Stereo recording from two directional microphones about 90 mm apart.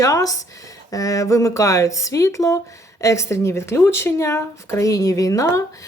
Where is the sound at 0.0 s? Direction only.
40° left (ahead or behind).